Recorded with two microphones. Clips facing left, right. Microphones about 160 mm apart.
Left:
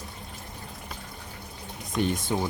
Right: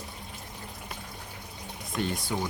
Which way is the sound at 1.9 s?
20° left (ahead or behind).